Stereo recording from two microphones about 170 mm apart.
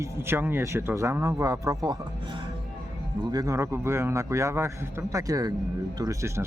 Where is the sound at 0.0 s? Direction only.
15° right (ahead or behind).